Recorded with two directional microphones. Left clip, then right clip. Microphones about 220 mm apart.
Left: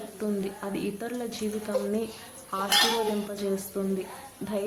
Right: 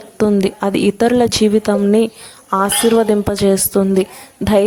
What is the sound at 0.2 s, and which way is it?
A woman's voice, 50° right (ahead or behind).